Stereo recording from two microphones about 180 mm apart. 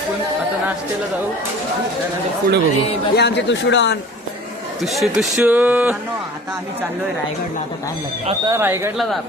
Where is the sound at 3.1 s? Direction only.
70° left (ahead or behind).